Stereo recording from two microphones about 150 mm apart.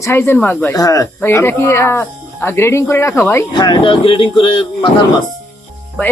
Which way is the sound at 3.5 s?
30° left (ahead or behind).